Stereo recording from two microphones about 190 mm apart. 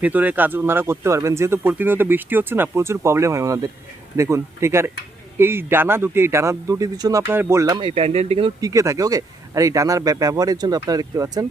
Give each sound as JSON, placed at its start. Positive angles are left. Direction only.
{"t": 0.0, "sound": "speech", "side_deg": -10}
{"t": 8.7, "sound": "speech", "side_deg": -15}